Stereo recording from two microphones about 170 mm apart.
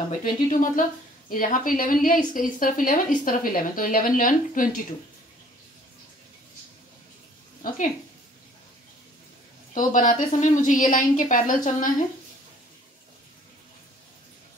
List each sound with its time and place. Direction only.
0.1 s a woman's voice: 50° left (ahead or behind)
9.8 s a woman's voice: 50° left (ahead or behind)